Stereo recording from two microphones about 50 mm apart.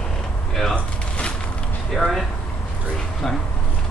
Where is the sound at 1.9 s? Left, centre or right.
Centre.